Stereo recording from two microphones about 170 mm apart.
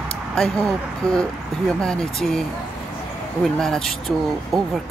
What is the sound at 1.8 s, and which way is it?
Speech, 5° left (ahead or behind).